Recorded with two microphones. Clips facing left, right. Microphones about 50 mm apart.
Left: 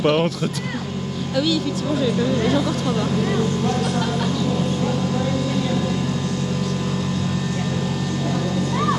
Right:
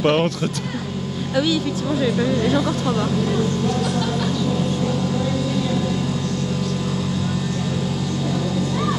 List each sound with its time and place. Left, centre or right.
0.0 s speech: centre
1.3 s speech: right
3.6 s music: left